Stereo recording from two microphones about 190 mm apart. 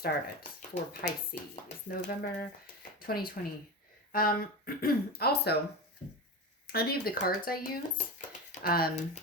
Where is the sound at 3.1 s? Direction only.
50° left (ahead or behind).